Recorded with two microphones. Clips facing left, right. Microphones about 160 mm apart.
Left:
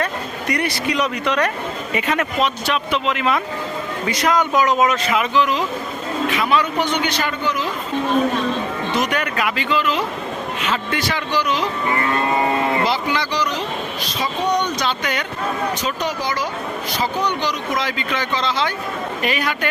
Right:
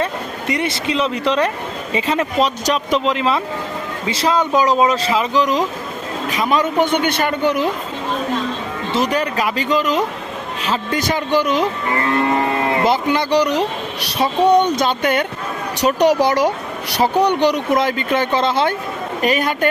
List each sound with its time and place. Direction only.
0.0 s a sound: 25° right (ahead or behind)
1.9 s speech: 25° right (ahead or behind); by 7.7 s 60° right (ahead or behind)
8.9 s speech: 30° right (ahead or behind); by 11.7 s 50° right (ahead or behind)
12.8 s speech: 50° right (ahead or behind)
15.8 s speech: 70° right (ahead or behind); by 19.5 s 45° right (ahead or behind)